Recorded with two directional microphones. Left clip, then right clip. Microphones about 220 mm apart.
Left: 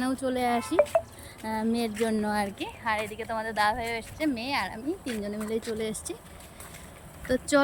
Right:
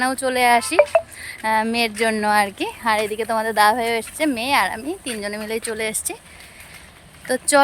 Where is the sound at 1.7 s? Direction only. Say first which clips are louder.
Right 9 dB; 65° right (ahead or behind).